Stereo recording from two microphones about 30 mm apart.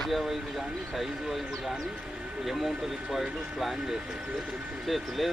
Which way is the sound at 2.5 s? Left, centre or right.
Centre.